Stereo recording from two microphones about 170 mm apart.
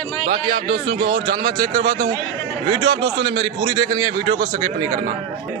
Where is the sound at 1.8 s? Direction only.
75° right (ahead or behind).